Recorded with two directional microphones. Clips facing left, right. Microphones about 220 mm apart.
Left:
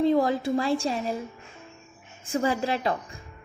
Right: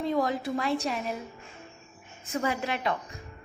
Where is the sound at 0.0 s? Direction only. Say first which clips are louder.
Left 6 dB; 30° left (ahead or behind).